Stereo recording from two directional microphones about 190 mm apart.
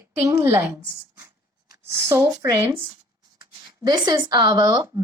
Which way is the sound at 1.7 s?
15° right (ahead or behind).